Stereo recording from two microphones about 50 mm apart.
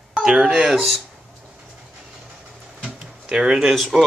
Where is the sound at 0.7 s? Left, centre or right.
Centre.